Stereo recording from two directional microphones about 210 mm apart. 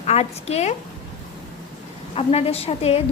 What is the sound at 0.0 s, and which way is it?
Speech, 30° left (ahead or behind).